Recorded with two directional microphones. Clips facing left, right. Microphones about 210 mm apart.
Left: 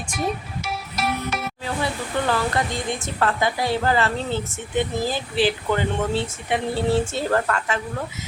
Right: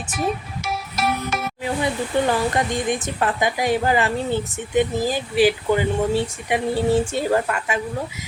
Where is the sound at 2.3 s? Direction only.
15° right (ahead or behind).